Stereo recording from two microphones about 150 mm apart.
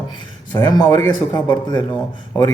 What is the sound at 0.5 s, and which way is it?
A man's voice, 25° left (ahead or behind).